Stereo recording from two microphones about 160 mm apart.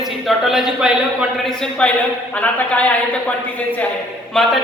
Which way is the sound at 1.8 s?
5° left (ahead or behind).